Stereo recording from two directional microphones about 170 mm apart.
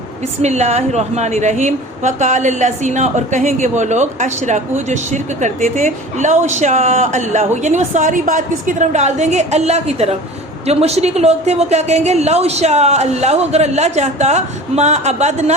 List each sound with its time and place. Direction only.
0.4 s a woman's voice: 40° right (ahead or behind)